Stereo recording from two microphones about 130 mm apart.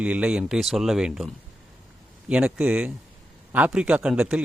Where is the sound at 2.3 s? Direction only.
5° right (ahead or behind).